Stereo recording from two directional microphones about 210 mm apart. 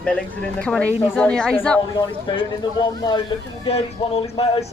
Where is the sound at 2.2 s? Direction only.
20° left (ahead or behind).